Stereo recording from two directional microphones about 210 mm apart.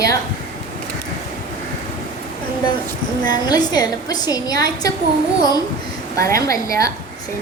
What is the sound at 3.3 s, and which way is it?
A woman's voice, 20° left (ahead or behind).